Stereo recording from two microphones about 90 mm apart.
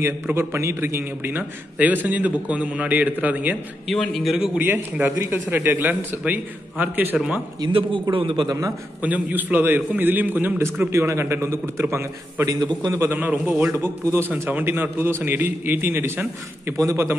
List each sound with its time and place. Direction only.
0.0 s a man's voice: 25° right (ahead or behind)
3.8 s a man's voice: centre (ahead or behind)
5.0 s a man's voice: 20° right (ahead or behind)
7.6 s a man's voice: 65° right (ahead or behind)
8.5 s a man's voice: 40° right (ahead or behind)
9.0 s a man's voice: 20° right (ahead or behind)
16.7 s a man's voice: 35° right (ahead or behind)